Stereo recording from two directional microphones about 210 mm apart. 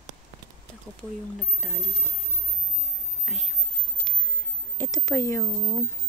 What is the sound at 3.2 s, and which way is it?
Speech, 5° right (ahead or behind).